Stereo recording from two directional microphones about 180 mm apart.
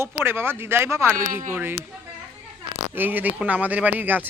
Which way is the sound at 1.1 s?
50° right (ahead or behind).